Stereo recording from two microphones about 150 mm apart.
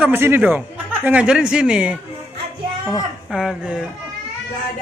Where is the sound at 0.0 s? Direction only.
15° right (ahead or behind).